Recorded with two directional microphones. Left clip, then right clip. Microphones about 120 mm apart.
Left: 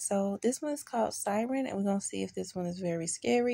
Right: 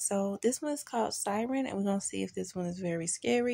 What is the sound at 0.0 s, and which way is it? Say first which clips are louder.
Speech: even; 20° right (ahead or behind).